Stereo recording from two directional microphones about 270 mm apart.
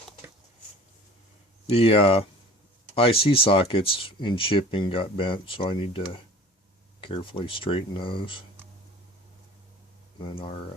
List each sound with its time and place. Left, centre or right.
1.6 s speech: left
10.2 s speech: centre